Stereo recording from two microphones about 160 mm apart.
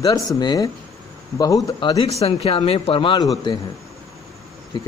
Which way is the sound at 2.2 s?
40° left (ahead or behind).